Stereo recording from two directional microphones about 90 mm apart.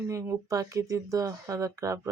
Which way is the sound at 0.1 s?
35° right (ahead or behind).